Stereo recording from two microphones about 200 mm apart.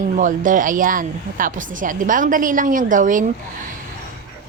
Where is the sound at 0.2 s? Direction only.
40° right (ahead or behind).